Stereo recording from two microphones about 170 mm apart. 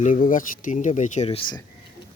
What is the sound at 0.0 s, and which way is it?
Speech, 50° left (ahead or behind).